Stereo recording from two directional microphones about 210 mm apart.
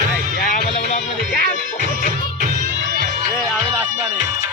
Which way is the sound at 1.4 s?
40° right (ahead or behind).